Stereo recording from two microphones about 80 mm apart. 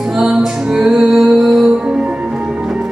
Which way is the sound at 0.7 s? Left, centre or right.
Centre.